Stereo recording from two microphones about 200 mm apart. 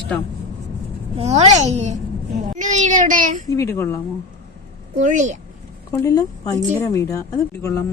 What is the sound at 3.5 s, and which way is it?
Speech, 15° left (ahead or behind).